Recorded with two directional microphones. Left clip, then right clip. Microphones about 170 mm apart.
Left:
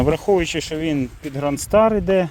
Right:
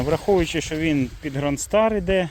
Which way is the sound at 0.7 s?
25° left (ahead or behind).